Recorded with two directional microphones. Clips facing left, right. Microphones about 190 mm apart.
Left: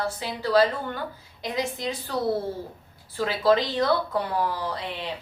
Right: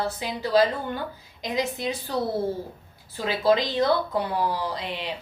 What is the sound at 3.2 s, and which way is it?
Speech, 15° right (ahead or behind).